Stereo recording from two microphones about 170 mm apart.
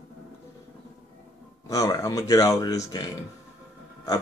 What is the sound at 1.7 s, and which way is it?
A man's voice, 20° left (ahead or behind).